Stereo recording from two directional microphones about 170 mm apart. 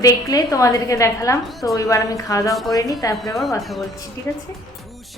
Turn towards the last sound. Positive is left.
turn(degrees=15)  # may be behind; listen again after turning